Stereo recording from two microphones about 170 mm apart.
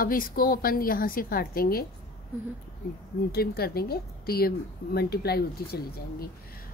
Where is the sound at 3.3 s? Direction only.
65° left (ahead or behind).